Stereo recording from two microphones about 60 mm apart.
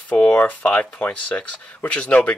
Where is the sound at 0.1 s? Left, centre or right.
Left.